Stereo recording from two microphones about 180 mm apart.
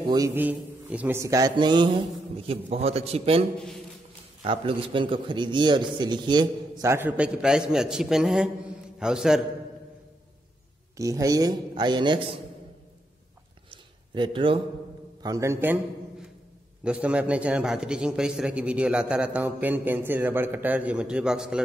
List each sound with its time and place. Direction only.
0.0 s a man's voice: 20° right (ahead or behind)
4.5 s a man's voice: 30° right (ahead or behind); by 9.4 s 5° right (ahead or behind)
11.0 s a man's voice: 20° right (ahead or behind)
13.7 s a sound: 25° right (ahead or behind)
15.2 s a man's voice: 15° right (ahead or behind)
16.8 s a man's voice: 5° right (ahead or behind)